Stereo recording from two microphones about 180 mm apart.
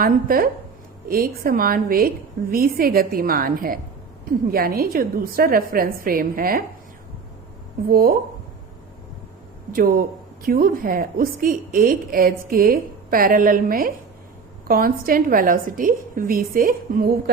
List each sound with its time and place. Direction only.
0.0 s a woman's voice: 55° right (ahead or behind)
7.9 s a woman's voice: 55° right (ahead or behind)
9.7 s a woman's voice: 50° right (ahead or behind)